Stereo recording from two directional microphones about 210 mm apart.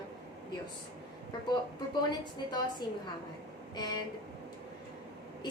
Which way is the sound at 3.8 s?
20° left (ahead or behind).